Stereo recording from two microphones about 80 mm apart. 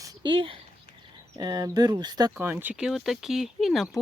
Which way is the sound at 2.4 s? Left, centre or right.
Right.